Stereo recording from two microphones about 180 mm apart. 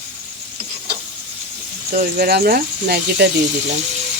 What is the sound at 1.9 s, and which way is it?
Speech, 55° right (ahead or behind).